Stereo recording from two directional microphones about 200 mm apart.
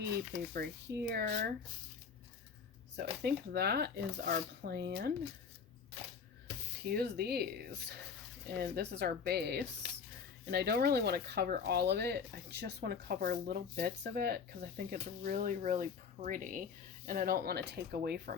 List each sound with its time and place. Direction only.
0.5 s speech: 50° right (ahead or behind)
2.9 s speech: 55° right (ahead or behind)
6.8 s speech: 50° right (ahead or behind)